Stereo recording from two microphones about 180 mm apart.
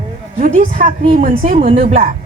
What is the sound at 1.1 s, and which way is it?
Speech, 50° right (ahead or behind).